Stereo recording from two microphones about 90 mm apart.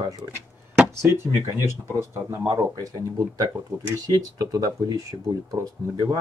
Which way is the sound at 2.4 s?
40° right (ahead or behind).